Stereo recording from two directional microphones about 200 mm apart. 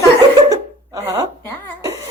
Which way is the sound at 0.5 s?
15° right (ahead or behind).